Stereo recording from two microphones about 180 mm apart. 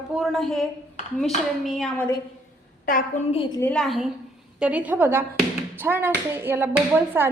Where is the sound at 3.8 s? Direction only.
Centre (ahead or behind).